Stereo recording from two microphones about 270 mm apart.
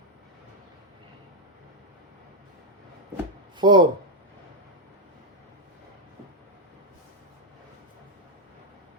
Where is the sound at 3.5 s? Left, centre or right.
Centre.